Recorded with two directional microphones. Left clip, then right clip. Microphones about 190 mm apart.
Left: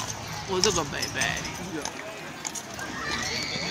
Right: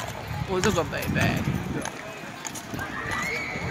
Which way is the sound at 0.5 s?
55° right (ahead or behind).